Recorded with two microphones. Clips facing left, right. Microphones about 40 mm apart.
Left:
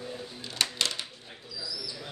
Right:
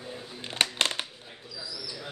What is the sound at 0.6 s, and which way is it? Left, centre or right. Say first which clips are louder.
Music: right 3 dB; right.